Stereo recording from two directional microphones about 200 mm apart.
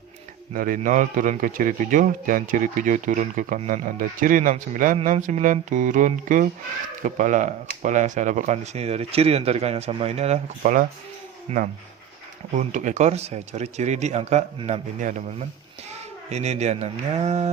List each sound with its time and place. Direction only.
0.5 s a man's voice: 45° right (ahead or behind)